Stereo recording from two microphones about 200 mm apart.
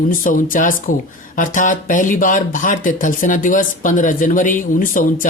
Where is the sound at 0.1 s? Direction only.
45° left (ahead or behind).